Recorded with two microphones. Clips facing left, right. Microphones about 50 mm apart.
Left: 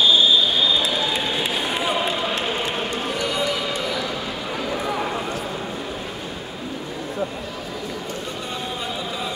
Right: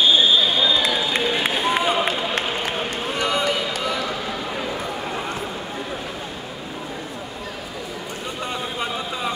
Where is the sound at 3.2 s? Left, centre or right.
Right.